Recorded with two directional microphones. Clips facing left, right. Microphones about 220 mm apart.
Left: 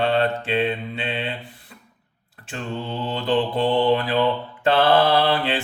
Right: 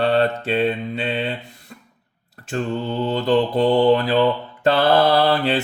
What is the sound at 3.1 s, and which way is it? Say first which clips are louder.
Mantra: right 3 dB; 40° right (ahead or behind).